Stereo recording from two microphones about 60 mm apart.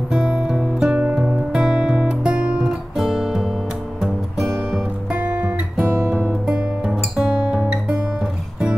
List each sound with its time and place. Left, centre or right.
0.1 s music: centre
1.1 s guitar: centre
4.0 s music: centre
5.1 s music: right